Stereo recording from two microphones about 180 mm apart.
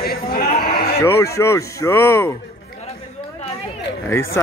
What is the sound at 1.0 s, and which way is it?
Speech, 15° left (ahead or behind).